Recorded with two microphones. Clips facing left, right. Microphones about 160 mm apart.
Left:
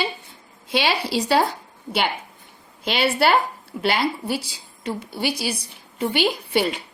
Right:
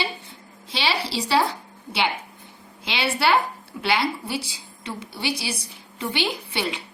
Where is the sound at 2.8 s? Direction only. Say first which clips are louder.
Left 4 dB; 45° left (ahead or behind).